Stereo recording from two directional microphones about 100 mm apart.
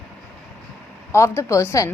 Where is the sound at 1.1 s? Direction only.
25° left (ahead or behind).